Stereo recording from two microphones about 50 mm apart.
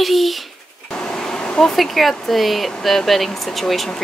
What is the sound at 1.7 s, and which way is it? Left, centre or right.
Speech, centre.